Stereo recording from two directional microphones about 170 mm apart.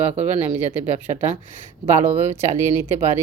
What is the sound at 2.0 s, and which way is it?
Speech, 15° right (ahead or behind).